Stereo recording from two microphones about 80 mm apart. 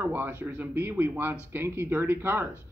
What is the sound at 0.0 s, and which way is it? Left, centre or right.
Speech, right.